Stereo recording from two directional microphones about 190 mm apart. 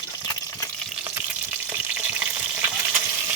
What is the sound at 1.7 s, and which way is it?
Frying, 10° right (ahead or behind).